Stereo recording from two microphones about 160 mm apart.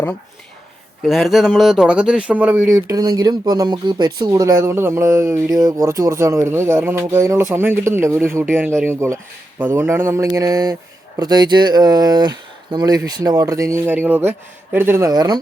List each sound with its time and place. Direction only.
1.0 s speech: centre (ahead or behind)
2.7 s speech: 20° right (ahead or behind)